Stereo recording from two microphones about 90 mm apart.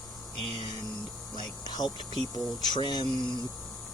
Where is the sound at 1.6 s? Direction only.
50° left (ahead or behind).